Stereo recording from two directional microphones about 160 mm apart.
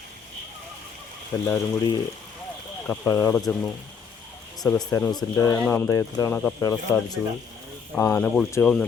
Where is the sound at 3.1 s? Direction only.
15° left (ahead or behind).